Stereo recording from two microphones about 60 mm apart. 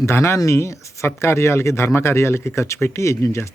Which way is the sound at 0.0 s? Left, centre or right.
Left.